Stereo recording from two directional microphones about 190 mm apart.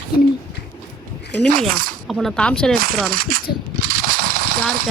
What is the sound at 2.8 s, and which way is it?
Speech, 50° right (ahead or behind).